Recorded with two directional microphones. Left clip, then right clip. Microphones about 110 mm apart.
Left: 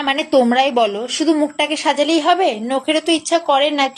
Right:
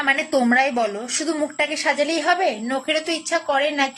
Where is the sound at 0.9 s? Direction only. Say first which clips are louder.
Left 7 dB; 15° left (ahead or behind).